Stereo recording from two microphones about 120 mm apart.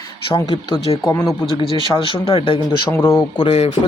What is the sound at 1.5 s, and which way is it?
Speech, 45° left (ahead or behind).